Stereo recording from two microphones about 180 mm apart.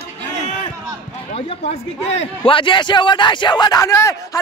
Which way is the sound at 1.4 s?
35° left (ahead or behind).